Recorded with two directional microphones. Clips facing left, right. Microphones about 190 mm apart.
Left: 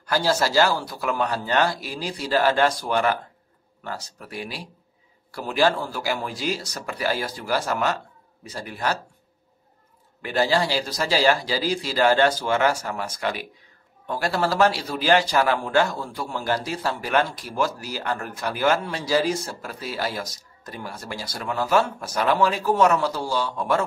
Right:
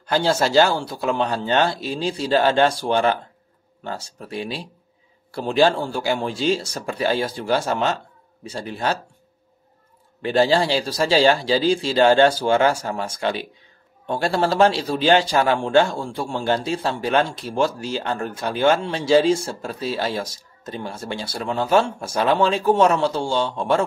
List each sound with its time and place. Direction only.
0.0 s speech: 25° right (ahead or behind)
10.2 s speech: 30° right (ahead or behind)